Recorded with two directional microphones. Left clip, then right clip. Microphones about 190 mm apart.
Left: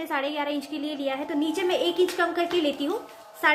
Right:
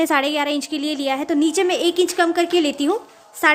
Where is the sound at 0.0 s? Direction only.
55° right (ahead or behind).